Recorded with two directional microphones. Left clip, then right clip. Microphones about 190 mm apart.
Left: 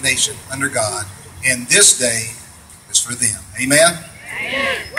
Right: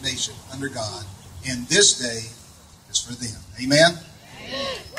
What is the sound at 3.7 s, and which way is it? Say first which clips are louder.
Speech: left 3 dB; 25° left (ahead or behind).